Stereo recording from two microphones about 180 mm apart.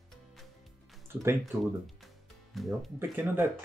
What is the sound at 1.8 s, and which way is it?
Music, centre (ahead or behind).